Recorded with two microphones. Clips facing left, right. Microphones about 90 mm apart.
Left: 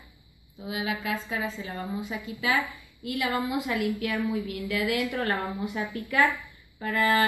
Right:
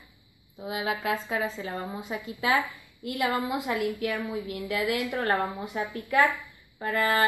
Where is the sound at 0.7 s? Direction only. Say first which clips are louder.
Right 2 dB; 40° right (ahead or behind).